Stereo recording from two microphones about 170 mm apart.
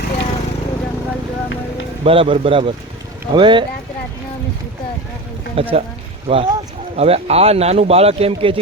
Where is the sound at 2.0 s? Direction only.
30° right (ahead or behind).